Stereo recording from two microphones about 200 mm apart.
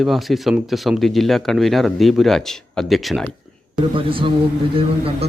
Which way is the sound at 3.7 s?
25° right (ahead or behind).